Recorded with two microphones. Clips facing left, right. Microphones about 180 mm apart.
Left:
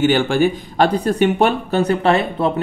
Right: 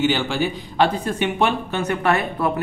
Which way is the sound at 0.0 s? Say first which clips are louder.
Left 6 dB; 50° left (ahead or behind).